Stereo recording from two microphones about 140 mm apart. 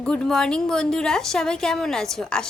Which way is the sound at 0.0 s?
5° left (ahead or behind).